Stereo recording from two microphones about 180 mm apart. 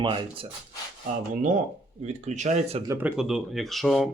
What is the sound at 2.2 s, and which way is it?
Speech, 40° right (ahead or behind).